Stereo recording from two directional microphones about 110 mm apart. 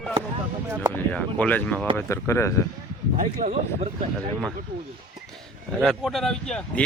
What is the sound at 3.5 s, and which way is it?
Speech, 90° right.